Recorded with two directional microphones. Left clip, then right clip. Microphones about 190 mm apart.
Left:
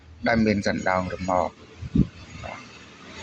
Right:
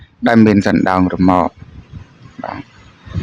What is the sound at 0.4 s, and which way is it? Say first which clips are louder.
Speech: right 11 dB; 40° right (ahead or behind).